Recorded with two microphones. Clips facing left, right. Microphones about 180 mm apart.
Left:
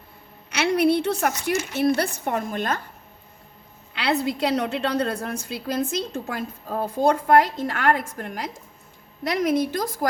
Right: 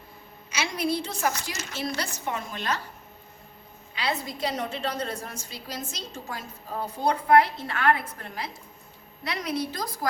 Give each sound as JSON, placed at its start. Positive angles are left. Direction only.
{"t": 0.5, "sound": "a woman's voice", "side_deg": 65}
{"t": 3.9, "sound": "a woman's voice", "side_deg": 70}